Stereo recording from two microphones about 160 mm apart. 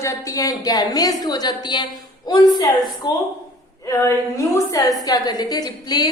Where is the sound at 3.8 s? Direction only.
20° left (ahead or behind).